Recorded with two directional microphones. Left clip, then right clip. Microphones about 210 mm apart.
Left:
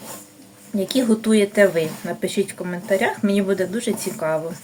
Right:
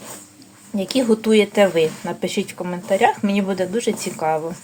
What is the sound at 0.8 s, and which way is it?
Speech, 20° right (ahead or behind).